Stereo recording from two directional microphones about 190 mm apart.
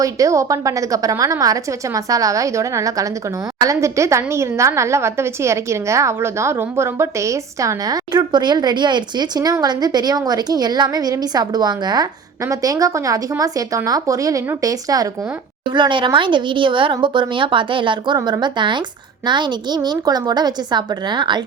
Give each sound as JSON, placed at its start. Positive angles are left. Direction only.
{"t": 0.0, "sound": "a woman's voice", "side_deg": -15}